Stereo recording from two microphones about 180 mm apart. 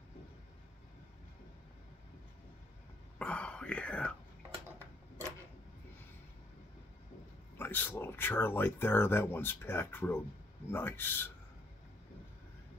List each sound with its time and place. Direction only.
3.2 s whispering: 5° left (ahead or behind)
7.5 s speech: 10° left (ahead or behind)